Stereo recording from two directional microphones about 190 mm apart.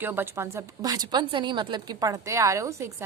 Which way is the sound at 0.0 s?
10° right (ahead or behind).